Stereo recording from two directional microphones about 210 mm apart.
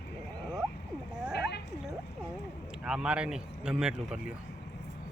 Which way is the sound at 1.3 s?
55° left (ahead or behind).